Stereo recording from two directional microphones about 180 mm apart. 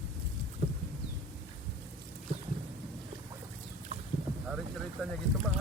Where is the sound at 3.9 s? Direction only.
35° right (ahead or behind).